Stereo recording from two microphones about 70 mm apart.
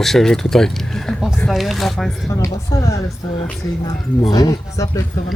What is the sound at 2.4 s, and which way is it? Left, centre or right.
Speech, left.